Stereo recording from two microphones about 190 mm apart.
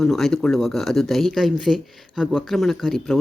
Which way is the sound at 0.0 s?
Centre (ahead or behind).